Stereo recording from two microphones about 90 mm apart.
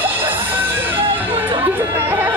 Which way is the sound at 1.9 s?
25° right (ahead or behind).